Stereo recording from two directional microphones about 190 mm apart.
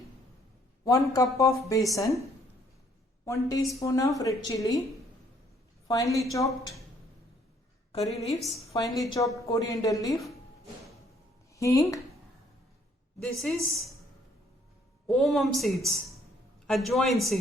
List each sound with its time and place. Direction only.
0.9 s a woman's voice: 20° left (ahead or behind)
3.2 s a woman's voice: 15° left (ahead or behind)
5.9 s a woman's voice: 15° left (ahead or behind)
8.4 s a woman's voice: centre (ahead or behind)
9.0 s a woman's voice: 20° left (ahead or behind)
11.5 s a woman's voice: 15° left (ahead or behind)
13.2 s a woman's voice: centre (ahead or behind)
15.0 s a woman's voice: centre (ahead or behind)